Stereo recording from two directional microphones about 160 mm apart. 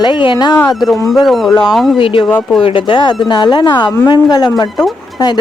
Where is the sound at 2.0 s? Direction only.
30° left (ahead or behind).